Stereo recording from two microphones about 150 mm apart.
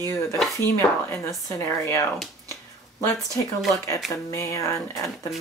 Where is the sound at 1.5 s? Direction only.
15° left (ahead or behind).